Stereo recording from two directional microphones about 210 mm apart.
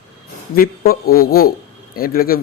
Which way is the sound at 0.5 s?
45° left (ahead or behind).